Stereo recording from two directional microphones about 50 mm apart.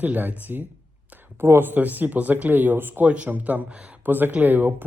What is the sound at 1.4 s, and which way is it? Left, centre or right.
Speech, right.